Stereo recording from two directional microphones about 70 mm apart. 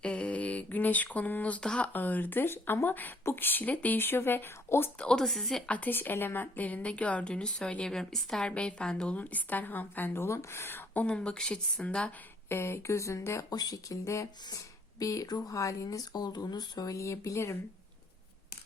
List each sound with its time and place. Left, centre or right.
0.0 s a woman's voice: centre; by 4.9 s left
4.9 s speech: centre
5.6 s a woman's voice: left
11.0 s speech: centre
12.5 s speech: left
13.5 s speech: left